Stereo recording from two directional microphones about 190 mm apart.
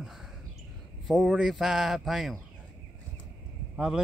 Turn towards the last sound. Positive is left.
turn(degrees=-5)  # may be behind; listen again after turning